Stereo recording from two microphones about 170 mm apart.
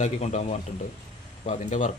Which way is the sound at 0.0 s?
40° left (ahead or behind).